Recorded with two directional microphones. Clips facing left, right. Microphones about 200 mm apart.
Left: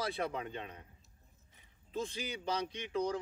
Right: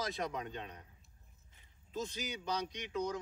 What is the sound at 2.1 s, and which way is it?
Speech, 30° left (ahead or behind).